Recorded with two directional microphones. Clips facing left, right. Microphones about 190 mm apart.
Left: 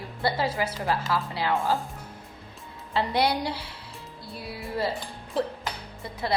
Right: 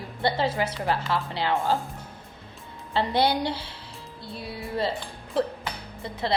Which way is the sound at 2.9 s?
30° right (ahead or behind).